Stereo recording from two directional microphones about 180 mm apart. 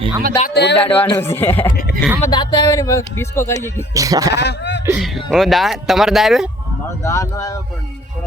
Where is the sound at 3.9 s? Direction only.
20° right (ahead or behind).